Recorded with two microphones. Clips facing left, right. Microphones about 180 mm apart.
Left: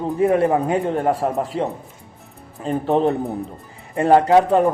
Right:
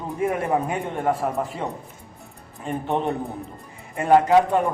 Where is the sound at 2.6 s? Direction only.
35° left (ahead or behind).